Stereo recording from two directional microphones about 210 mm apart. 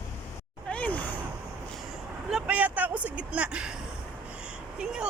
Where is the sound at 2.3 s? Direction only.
5° right (ahead or behind).